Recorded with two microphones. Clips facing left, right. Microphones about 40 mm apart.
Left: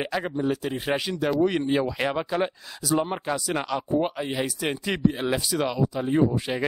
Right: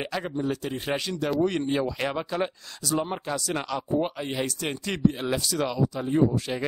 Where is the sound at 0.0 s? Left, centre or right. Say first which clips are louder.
Left 3 dB; centre.